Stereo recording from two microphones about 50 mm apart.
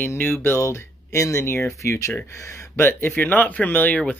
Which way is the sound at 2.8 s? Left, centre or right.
Left.